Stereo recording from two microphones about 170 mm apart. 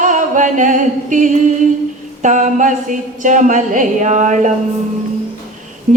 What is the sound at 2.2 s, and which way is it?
A woman's voice, 45° right (ahead or behind).